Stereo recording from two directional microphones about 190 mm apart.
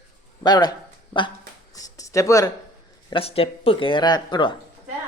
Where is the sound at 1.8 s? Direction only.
15° left (ahead or behind).